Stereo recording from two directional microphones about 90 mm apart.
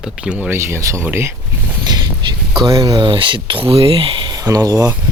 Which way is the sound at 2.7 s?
45° right (ahead or behind).